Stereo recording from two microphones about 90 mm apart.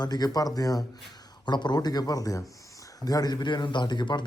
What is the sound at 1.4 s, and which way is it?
A man's voice, 55° left (ahead or behind).